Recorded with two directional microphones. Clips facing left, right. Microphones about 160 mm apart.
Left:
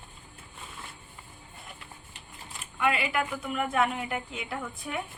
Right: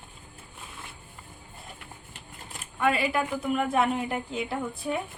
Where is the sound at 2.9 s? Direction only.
35° right (ahead or behind).